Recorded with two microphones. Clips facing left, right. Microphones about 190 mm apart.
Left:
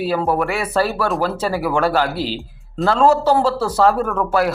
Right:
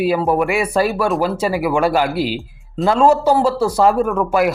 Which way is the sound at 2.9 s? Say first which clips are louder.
Right 1 dB; 15° right (ahead or behind).